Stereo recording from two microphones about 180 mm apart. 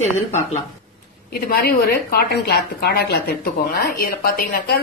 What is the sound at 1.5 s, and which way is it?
A woman's voice, 55° left (ahead or behind).